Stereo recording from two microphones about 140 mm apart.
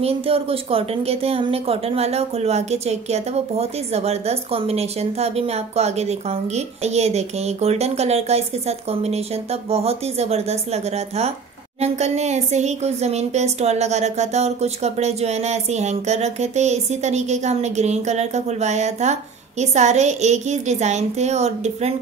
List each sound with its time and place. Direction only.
0.0 s a woman's voice: 45° right (ahead or behind)